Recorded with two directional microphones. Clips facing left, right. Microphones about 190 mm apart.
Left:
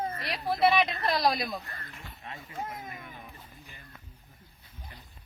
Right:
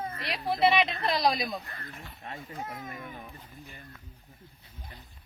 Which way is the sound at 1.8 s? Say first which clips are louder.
Right 2 dB; 40° right (ahead or behind).